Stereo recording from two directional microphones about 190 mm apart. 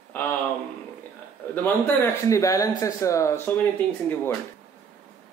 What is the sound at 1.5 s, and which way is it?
Speech, 10° left (ahead or behind).